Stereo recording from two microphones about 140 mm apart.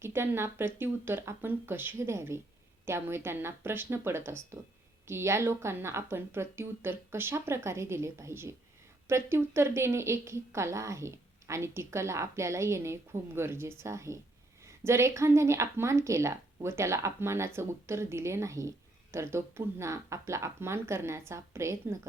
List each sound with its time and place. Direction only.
0.0 s a woman's voice: 15° right (ahead or behind)